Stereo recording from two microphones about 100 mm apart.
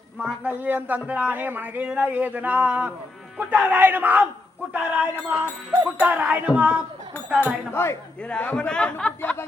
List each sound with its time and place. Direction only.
0.2 s a man's voice: 15° right (ahead or behind)
7.7 s speech: 25° left (ahead or behind)
8.2 s a man's voice: 15° left (ahead or behind)